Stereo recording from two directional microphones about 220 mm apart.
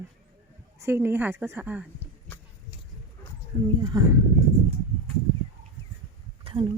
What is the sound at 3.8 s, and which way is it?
Speech, 15° right (ahead or behind).